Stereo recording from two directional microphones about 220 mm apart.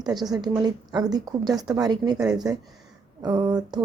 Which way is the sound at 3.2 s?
20° right (ahead or behind).